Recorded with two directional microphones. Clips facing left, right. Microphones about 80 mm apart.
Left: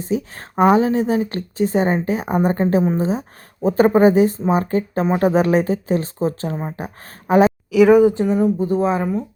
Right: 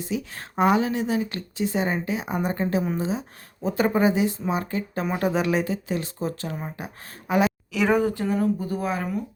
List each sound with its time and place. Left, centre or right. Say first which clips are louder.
0.0 s speech: left 7 dB; left
3.1 s speech: left 6 dB; left
7.7 s speech: left 13 dB; centre
8.1 s speech: left 6 dB; left